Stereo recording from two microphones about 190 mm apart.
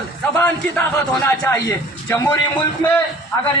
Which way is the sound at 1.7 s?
15° left (ahead or behind).